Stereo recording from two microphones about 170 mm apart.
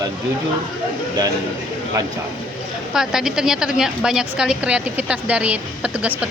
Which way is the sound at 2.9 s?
5° right (ahead or behind).